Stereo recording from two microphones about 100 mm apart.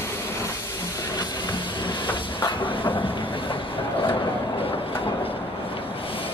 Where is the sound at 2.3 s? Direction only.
55° left (ahead or behind).